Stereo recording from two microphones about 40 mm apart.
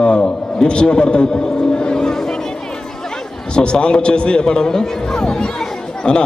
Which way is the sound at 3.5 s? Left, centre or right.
Left.